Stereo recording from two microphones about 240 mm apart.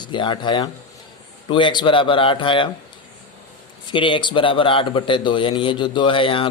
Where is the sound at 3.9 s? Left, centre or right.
Left.